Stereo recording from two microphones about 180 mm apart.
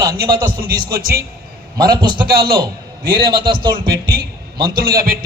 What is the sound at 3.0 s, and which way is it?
A man's voice, 55° right (ahead or behind).